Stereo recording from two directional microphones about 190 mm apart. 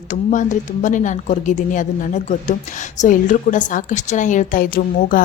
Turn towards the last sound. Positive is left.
turn(degrees=45)  # may be behind; listen again after turning